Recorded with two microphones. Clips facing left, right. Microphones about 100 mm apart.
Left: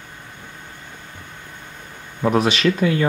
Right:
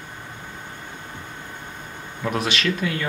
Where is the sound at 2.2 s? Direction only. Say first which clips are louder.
Left 7 dB; 35° left (ahead or behind).